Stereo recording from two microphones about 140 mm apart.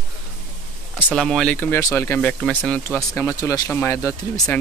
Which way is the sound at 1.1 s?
5° left (ahead or behind).